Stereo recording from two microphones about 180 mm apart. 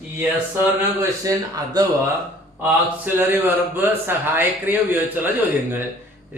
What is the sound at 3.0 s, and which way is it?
A man's voice, 10° right (ahead or behind).